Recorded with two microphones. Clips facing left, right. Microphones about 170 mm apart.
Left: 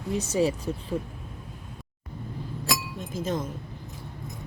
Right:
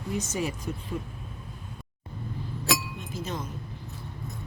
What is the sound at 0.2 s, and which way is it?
Speech, 35° left (ahead or behind).